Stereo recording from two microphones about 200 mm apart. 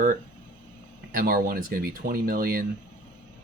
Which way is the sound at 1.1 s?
45° right (ahead or behind).